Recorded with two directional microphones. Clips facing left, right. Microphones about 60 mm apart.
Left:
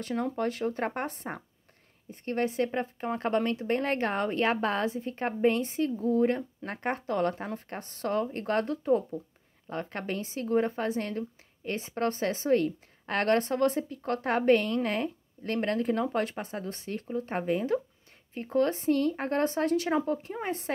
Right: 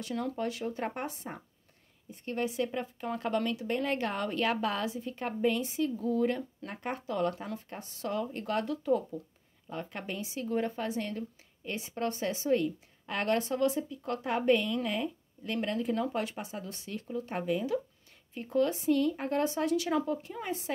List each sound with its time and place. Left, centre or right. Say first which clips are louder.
0.0 s a woman's voice: left 4 dB; left
6.7 s speech: left 5 dB; left
9.7 s a woman's voice: left 4 dB; left